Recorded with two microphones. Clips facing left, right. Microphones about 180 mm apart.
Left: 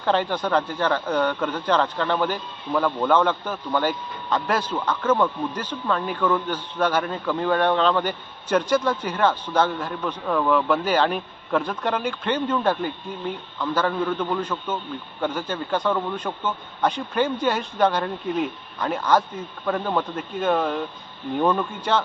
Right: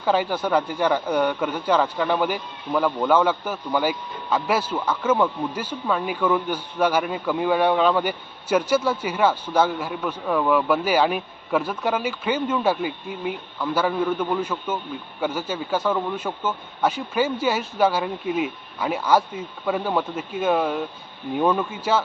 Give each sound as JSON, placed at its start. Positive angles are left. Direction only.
{"t": 0.0, "sound": "speech", "side_deg": -10}